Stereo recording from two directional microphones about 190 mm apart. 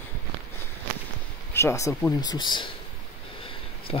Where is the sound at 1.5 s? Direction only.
15° left (ahead or behind).